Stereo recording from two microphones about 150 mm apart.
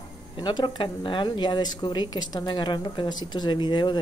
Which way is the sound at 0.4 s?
30° left (ahead or behind).